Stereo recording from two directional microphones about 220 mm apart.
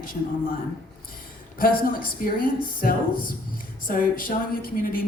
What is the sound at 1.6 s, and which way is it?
A man's voice, 40° left (ahead or behind).